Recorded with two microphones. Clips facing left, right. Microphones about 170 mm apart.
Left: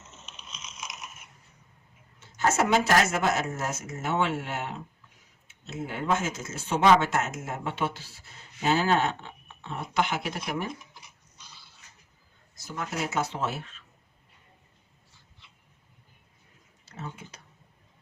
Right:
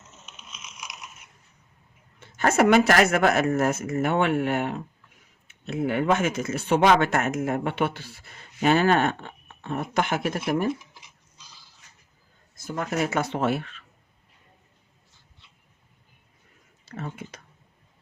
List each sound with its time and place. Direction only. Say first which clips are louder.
2.1 s speech: right 4 dB; 60° right (ahead or behind)
12.5 s speech: right 6 dB; 55° right (ahead or behind)
17.0 s speech: right 4 dB; 60° right (ahead or behind)